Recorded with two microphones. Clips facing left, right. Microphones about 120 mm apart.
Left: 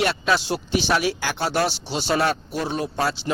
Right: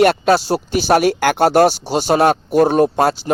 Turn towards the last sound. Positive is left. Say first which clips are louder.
# right 11 dB
turn(degrees=-50)  # may be behind; listen again after turning